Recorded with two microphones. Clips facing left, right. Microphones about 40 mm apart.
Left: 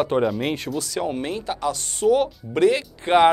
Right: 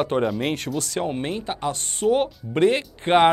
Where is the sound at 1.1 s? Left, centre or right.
Right.